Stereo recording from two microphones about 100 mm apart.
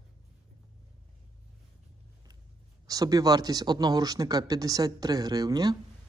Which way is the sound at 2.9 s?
40° right (ahead or behind).